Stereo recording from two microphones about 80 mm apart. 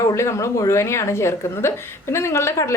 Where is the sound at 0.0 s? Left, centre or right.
Left.